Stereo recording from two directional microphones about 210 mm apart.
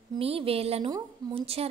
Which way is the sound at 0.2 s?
25° right (ahead or behind).